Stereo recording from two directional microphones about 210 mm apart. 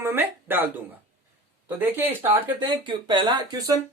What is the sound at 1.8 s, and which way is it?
Speech, 10° right (ahead or behind).